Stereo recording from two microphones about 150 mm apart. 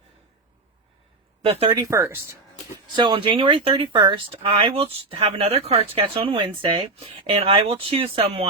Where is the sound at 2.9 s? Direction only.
30° right (ahead or behind).